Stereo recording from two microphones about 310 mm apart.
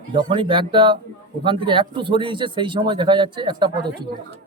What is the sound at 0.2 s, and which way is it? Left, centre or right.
Speech, centre.